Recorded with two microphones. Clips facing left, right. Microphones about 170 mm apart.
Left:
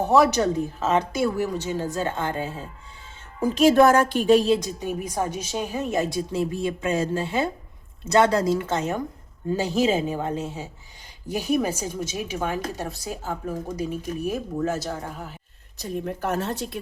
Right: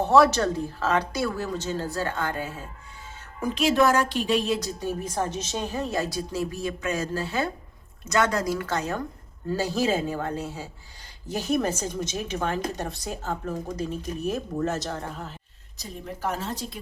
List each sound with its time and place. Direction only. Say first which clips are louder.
0.0 s a woman's voice: even; 15° left (ahead or behind)
3.4 s a woman's voice: left 5 dB; 40° left (ahead or behind)
4.6 s a woman's voice: left 1 dB; 15° left (ahead or behind)
15.8 s a woman's voice: left 4 dB; 60° left (ahead or behind)